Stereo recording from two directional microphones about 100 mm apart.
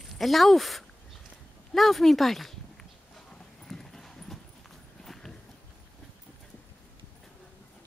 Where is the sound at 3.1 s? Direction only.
5° left (ahead or behind).